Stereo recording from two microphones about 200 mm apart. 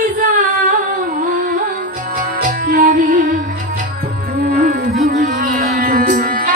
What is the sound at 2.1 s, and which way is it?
Music, 45° right (ahead or behind).